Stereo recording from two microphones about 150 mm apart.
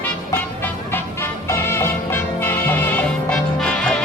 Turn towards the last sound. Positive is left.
turn(degrees=5)  # may be behind; listen again after turning